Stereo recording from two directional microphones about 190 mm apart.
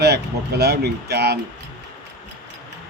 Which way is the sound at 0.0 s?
60° right (ahead or behind).